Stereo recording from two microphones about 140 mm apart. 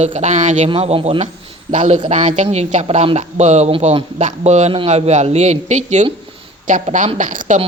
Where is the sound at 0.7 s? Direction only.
40° right (ahead or behind).